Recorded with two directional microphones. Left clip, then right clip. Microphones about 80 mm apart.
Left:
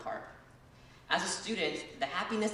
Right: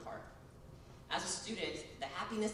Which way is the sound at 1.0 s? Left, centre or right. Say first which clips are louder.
Left 7 dB; left.